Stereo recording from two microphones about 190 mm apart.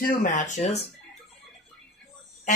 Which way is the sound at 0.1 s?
45° left (ahead or behind).